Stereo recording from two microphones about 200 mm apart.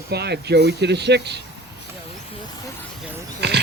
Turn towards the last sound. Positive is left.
turn(degrees=-55)  # may be behind; listen again after turning